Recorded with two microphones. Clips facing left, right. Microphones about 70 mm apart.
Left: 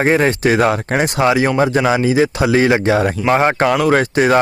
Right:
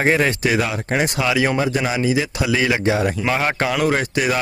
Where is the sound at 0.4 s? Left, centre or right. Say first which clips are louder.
Left 6 dB; left.